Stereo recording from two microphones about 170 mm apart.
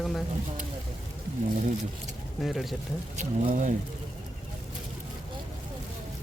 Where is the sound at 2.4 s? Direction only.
Centre (ahead or behind).